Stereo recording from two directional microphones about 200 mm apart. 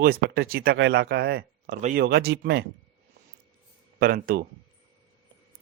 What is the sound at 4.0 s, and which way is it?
Speech, 45° right (ahead or behind).